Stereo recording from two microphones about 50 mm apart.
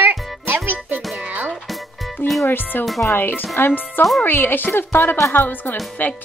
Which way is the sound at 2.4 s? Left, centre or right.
Left.